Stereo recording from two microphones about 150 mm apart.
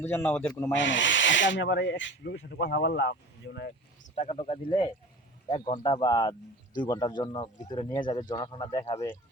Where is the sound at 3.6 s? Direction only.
75° left (ahead or behind); by 4.3 s 55° left (ahead or behind).